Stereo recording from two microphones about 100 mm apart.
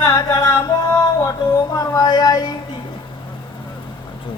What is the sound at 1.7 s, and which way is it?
Speech, 35° left (ahead or behind).